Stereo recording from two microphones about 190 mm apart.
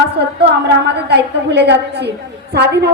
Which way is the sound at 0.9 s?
60° right (ahead or behind).